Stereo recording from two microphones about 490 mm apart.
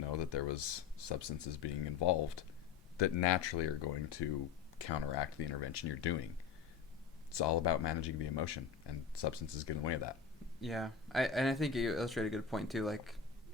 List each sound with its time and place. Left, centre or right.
0.2 s speech: left
3.0 s speech: left
7.3 s speech: left
10.6 s speech: centre